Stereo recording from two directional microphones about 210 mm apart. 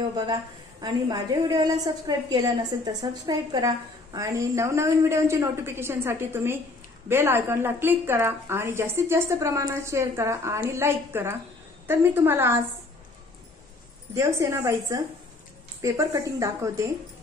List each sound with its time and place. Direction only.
0.1 s a woman's voice: 20° right (ahead or behind)
14.1 s a woman's voice: 15° right (ahead or behind)